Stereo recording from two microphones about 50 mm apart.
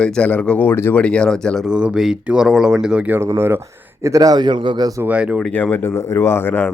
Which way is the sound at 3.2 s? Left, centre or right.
Right.